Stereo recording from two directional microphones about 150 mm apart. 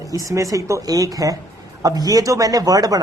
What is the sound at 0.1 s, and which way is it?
Speech, 20° right (ahead or behind).